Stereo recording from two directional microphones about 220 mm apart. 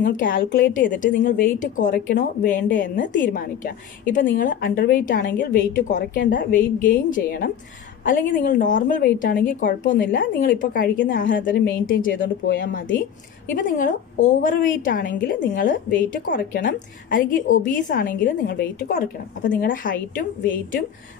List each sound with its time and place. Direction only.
0.0 s a woman's voice: 40° left (ahead or behind)
3.0 s a woman's voice: 50° left (ahead or behind)